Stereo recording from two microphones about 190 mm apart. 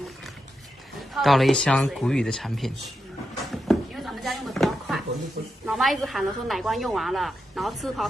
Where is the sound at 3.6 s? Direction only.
Centre (ahead or behind).